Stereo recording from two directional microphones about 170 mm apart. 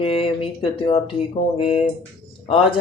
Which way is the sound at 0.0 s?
30° left (ahead or behind).